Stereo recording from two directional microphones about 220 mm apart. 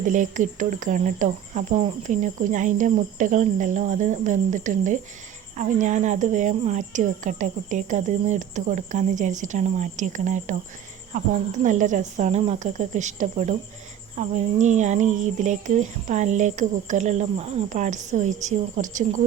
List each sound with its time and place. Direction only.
0.1 s a woman's voice: 35° right (ahead or behind)